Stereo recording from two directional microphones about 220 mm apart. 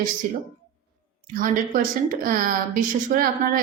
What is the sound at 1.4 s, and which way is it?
A woman's voice, 40° right (ahead or behind).